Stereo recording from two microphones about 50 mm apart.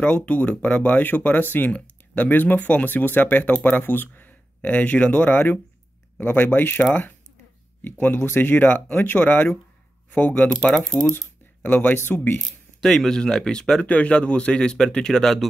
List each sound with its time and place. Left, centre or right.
0.0 s speech: left
7.8 s speech: left
10.8 s speech: centre
11.6 s speech: left
12.4 s speech: centre
13.8 s speech: left; by 15.4 s centre